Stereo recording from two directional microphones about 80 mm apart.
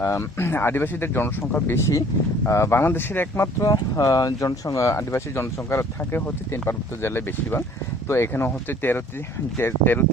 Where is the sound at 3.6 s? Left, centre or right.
Left.